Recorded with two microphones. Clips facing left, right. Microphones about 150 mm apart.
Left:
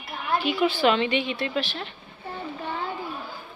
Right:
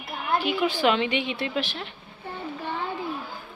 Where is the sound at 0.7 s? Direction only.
15° right (ahead or behind).